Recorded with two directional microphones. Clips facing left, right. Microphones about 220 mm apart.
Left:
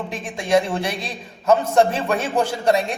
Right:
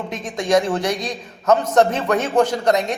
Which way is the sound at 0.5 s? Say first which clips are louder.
Right 1 dB; 25° left (ahead or behind).